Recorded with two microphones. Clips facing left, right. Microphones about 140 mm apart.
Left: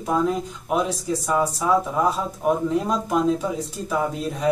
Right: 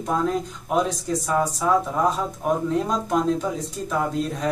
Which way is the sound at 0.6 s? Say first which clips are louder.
Even; 5° left (ahead or behind).